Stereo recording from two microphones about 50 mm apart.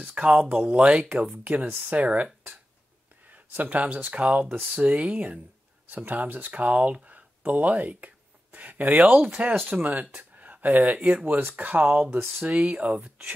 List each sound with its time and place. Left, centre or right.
0.1 s speech: right
3.3 s speech: right
7.1 s a sound: right
8.9 s speech: right